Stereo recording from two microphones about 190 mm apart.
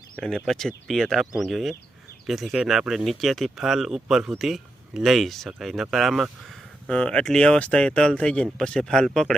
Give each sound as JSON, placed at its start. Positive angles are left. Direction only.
{"t": 0.2, "sound": "speech", "side_deg": 5}